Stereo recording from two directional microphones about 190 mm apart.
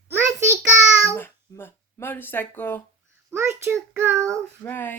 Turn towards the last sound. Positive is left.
turn(degrees=10)  # may be behind; listen again after turning